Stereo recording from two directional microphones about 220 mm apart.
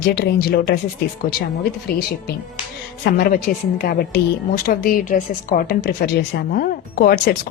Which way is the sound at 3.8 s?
40° left (ahead or behind).